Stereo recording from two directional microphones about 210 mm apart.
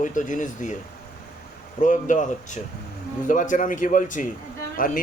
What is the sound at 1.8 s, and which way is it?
Speech, 35° left (ahead or behind).